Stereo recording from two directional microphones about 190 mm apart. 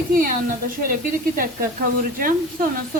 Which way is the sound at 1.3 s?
50° right (ahead or behind).